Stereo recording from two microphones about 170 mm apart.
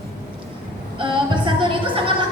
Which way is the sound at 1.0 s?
30° right (ahead or behind).